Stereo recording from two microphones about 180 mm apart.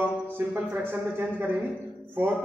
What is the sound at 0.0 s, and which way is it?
A man's voice, 10° right (ahead or behind).